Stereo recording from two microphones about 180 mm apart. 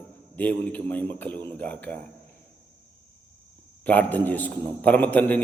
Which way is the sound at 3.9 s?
10° left (ahead or behind).